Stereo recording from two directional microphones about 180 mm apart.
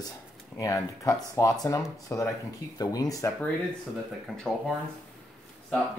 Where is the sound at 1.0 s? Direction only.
15° left (ahead or behind).